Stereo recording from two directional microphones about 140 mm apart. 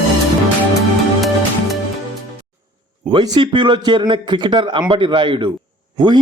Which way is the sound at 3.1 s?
35° right (ahead or behind).